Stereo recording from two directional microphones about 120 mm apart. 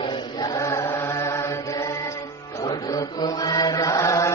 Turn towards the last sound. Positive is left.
turn(degrees=25)  # may be behind; listen again after turning